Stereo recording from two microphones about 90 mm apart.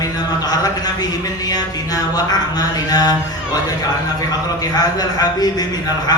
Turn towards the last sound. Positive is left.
turn(degrees=45)  # may be behind; listen again after turning